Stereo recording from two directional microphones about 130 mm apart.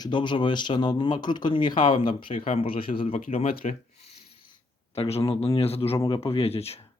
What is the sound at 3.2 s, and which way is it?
Speech, 90° left.